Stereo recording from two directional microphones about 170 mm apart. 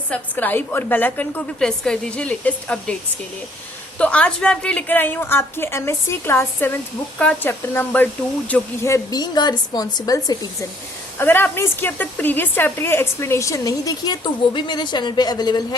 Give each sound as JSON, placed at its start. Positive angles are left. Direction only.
{"t": 0.1, "sound": "a woman's voice", "side_deg": 10}
{"t": 3.9, "sound": "a woman's voice", "side_deg": 5}